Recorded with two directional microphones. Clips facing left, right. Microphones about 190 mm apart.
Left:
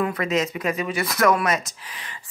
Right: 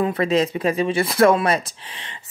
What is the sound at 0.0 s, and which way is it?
Speech, 30° right (ahead or behind).